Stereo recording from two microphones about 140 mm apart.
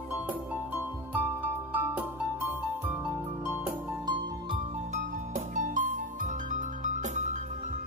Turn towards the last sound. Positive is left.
turn(degrees=-60)  # may be behind; listen again after turning